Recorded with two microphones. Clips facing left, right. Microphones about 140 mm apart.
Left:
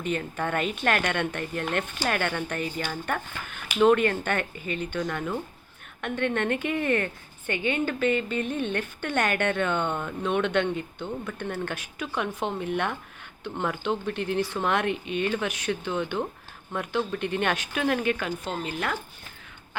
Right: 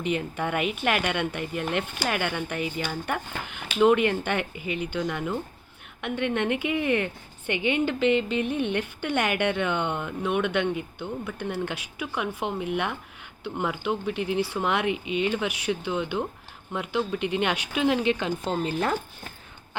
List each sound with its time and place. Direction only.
0.0 s a woman's voice: 15° right (ahead or behind)
18.5 s speech: 30° right (ahead or behind)